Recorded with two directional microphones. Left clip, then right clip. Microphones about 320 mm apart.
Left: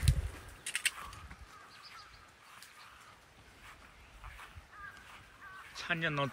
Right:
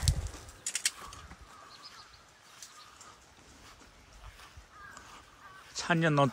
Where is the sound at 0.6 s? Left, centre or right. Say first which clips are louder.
Even; right.